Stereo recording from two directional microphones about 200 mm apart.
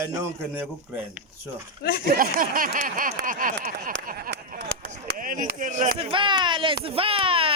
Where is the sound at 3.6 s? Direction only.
45° right (ahead or behind); by 4.8 s 60° right (ahead or behind).